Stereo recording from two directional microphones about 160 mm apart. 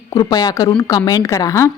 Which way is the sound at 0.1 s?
25° left (ahead or behind).